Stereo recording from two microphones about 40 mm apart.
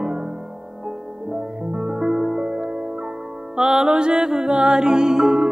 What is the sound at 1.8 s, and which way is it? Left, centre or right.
Music, centre.